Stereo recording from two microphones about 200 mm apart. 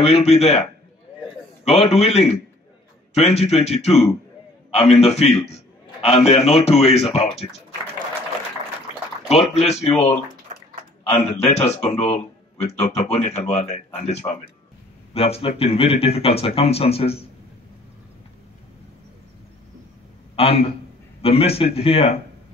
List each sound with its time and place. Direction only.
0.0 s a man's voice: 30° left (ahead or behind)
9.3 s a man's voice: 30° left (ahead or behind)
20.3 s speech: 30° left (ahead or behind)